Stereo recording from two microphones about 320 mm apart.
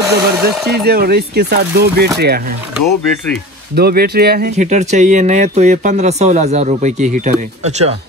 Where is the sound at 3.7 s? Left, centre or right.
Right.